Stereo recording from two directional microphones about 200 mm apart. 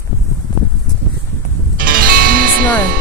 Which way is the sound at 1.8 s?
45° right (ahead or behind).